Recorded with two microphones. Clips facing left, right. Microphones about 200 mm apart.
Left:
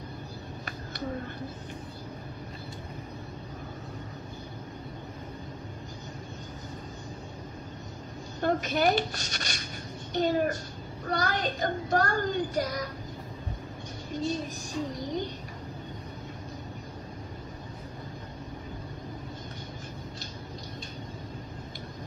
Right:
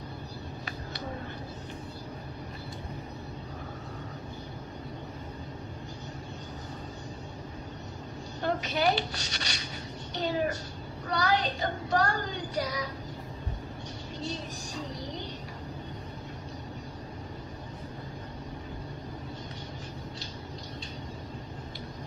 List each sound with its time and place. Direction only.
8.4 s child singing: 50° left (ahead or behind)